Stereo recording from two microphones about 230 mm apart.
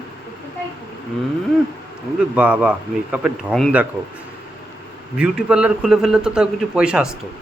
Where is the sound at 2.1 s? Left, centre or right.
Centre.